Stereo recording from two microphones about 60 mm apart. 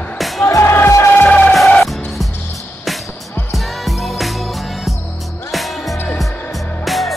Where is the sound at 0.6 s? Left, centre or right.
Left.